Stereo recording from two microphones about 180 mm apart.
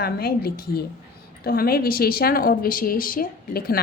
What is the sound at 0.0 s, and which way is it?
A woman's voice, 60° left (ahead or behind).